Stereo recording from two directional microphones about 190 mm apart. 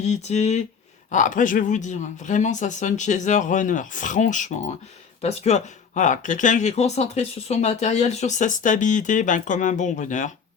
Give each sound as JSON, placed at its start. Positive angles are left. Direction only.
{"t": 0.0, "sound": "speech", "side_deg": 35}